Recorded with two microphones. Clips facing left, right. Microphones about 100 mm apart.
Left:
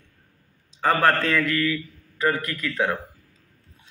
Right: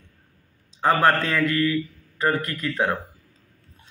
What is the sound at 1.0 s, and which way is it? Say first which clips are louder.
A man's voice: right 1 dB; 20° right (ahead or behind).